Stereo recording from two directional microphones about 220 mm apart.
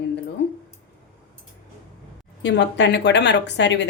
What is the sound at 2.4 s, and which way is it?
A woman's voice, 50° left (ahead or behind).